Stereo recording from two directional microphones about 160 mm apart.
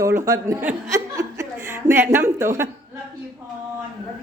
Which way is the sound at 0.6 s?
20° right (ahead or behind).